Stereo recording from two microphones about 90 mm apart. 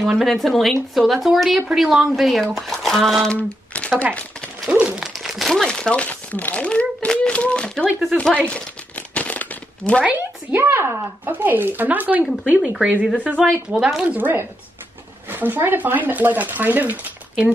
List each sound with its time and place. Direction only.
0.0 s speech: centre (ahead or behind)
3.3 s speech: 15° left (ahead or behind)
4.8 s crumpling: 5° right (ahead or behind); by 7.9 s 10° left (ahead or behind)
8.0 s speech: 5° left (ahead or behind)
8.5 s crumpling: 15° left (ahead or behind)
10.0 s speech: 25° right (ahead or behind); by 14.1 s 5° right (ahead or behind)
14.1 s speech: 25° right (ahead or behind)